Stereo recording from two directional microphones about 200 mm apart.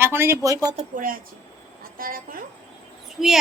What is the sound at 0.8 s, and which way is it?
Speech, 45° right (ahead or behind).